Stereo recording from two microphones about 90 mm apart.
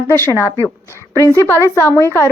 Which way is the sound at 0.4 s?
25° left (ahead or behind).